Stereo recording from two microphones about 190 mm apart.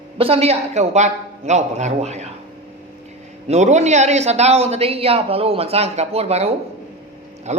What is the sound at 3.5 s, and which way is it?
Speech, 35° right (ahead or behind).